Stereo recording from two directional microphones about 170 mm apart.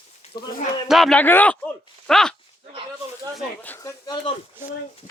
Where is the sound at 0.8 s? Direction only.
Centre (ahead or behind).